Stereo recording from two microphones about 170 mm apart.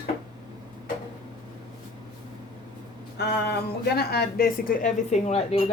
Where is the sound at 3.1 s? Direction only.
75° left (ahead or behind).